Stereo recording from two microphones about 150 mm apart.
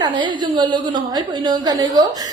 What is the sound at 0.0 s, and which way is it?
A woman's voice, 30° right (ahead or behind).